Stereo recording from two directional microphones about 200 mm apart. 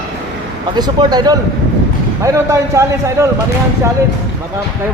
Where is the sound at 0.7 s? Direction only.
20° right (ahead or behind).